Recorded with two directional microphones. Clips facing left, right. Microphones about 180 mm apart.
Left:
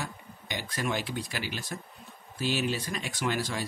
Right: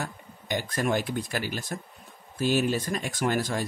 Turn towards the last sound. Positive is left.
turn(degrees=-50)  # may be behind; listen again after turning